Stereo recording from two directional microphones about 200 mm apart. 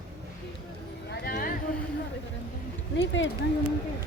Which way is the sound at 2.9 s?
60° left (ahead or behind).